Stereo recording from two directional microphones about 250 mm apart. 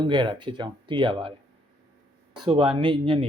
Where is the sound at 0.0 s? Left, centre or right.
Centre.